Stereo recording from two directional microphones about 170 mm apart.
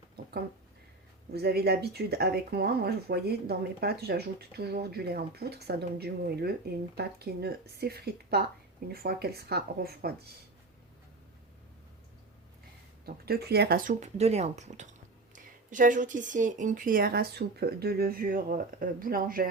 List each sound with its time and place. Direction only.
1.3 s speech: 70° right (ahead or behind)
13.1 s speech: 65° right (ahead or behind)